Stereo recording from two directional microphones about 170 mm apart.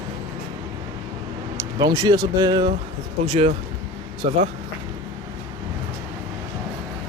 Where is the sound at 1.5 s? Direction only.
25° right (ahead or behind).